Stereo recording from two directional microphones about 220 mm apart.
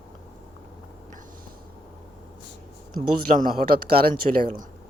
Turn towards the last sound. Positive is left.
turn(degrees=-40)  # may be behind; listen again after turning